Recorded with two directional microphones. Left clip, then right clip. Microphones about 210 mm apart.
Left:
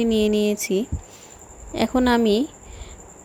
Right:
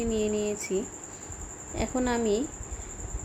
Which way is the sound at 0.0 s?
40° left (ahead or behind).